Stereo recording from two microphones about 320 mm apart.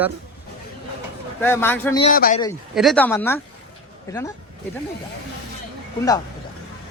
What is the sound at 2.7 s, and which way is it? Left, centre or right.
A man's voice, centre.